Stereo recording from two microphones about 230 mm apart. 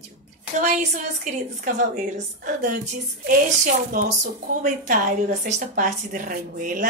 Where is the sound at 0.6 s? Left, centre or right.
Right.